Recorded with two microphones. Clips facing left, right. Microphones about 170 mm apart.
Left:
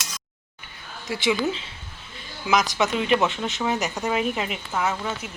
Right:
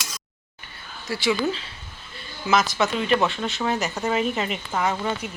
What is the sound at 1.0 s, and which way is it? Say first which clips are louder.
Speech: even; 15° left (ahead or behind).